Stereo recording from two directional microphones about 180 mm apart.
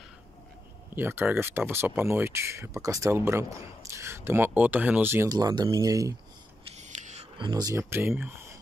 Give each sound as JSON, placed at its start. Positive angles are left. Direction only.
{"t": 0.9, "sound": "speech", "side_deg": -10}
{"t": 6.8, "sound": "a sound", "side_deg": -40}
{"t": 7.3, "sound": "speech", "side_deg": -25}